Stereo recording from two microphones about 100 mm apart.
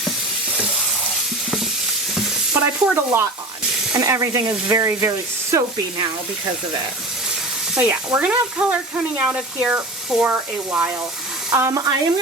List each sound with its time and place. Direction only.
2.6 s stir: 20° right (ahead or behind)
3.9 s speech: 30° right (ahead or behind)
7.8 s speech: 15° right (ahead or behind)
11.5 s speech: 30° right (ahead or behind)